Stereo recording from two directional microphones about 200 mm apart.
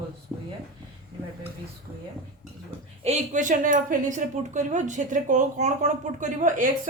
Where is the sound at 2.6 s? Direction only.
30° right (ahead or behind).